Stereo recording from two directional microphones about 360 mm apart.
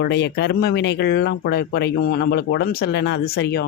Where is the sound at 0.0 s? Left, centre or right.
Left.